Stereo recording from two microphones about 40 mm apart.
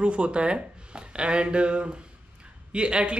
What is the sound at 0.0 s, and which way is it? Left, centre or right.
Speech, right.